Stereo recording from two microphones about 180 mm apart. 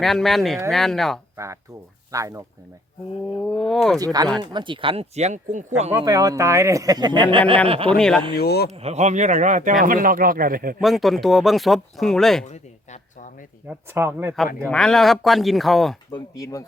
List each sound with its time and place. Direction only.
0.0 s speech: centre (ahead or behind)
2.1 s a man's voice: 15° right (ahead or behind)
3.4 s speech: 5° left (ahead or behind)
3.9 s speech: 20° right (ahead or behind); by 5.9 s 40° right (ahead or behind)
5.9 s speech: 20° right (ahead or behind)
7.9 s speech: 5° left (ahead or behind)
8.3 s speech: 60° left (ahead or behind)
8.7 s speech: 35° right (ahead or behind); by 10.8 s 55° right (ahead or behind)
10.8 s speech: centre (ahead or behind)
12.5 s a sound: 40° left (ahead or behind)
13.7 s a man's voice: 10° right (ahead or behind)
14.7 s speech: 5° left (ahead or behind)
16.1 s speech: 20° left (ahead or behind)